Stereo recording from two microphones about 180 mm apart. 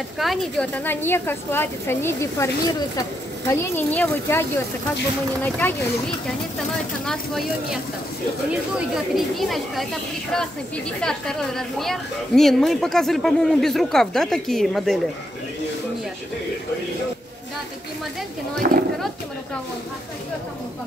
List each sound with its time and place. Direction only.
0.2 s a woman's voice: centre (ahead or behind)
11.0 s speech: 5° left (ahead or behind)
18.6 s speech: 50° right (ahead or behind)